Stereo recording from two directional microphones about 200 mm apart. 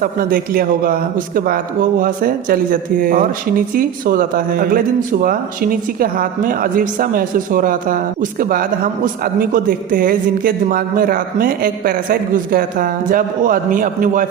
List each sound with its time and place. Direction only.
0.0 s a man's voice: 45° right (ahead or behind)